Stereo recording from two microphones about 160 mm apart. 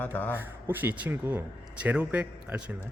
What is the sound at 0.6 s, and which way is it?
Speech, 10° right (ahead or behind).